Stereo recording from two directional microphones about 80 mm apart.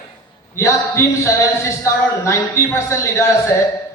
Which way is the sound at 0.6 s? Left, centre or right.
Left.